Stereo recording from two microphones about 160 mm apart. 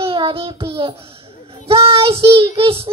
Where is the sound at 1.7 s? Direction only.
35° right (ahead or behind).